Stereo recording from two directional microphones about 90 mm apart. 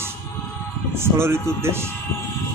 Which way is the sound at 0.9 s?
30° right (ahead or behind).